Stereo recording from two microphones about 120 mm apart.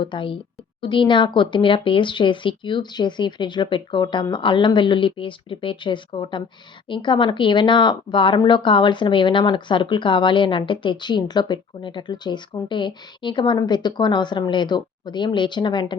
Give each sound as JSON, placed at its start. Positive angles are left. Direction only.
{"t": 0.0, "sound": "speech", "side_deg": 45}